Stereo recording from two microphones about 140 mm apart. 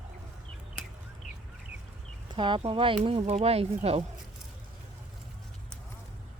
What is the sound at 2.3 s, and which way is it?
Speech, 35° right (ahead or behind).